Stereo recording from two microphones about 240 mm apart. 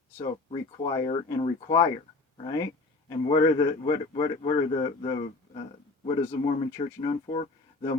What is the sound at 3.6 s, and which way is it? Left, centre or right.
Speech, centre.